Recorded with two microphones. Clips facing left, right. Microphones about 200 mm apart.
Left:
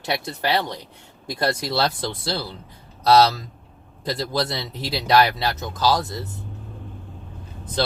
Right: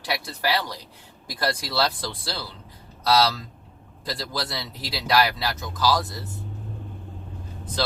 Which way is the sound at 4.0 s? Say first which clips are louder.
Left 6 dB; 25° left (ahead or behind).